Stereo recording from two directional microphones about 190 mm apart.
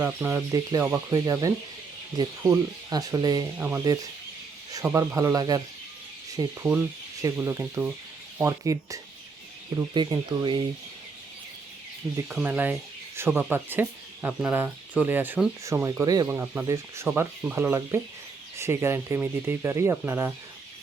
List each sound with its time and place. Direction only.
0.0 s speech: 15° right (ahead or behind)
12.3 s speech: 10° right (ahead or behind)